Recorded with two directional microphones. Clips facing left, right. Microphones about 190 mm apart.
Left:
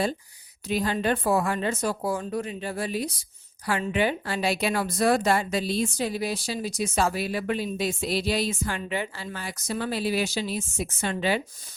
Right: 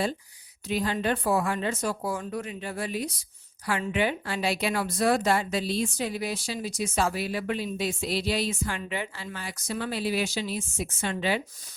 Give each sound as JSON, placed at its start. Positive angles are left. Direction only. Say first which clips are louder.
{"t": 0.7, "sound": "speech", "louder": "left 2 dB", "side_deg": 40}